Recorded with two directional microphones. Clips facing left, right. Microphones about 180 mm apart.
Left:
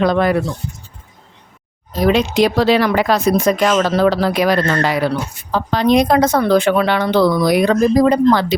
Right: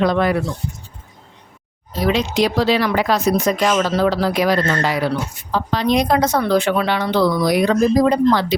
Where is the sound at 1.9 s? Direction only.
50° left (ahead or behind).